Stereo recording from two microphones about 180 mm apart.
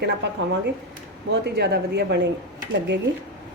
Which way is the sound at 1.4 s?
70° right (ahead or behind).